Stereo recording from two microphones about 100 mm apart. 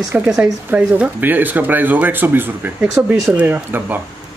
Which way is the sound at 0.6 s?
15° right (ahead or behind).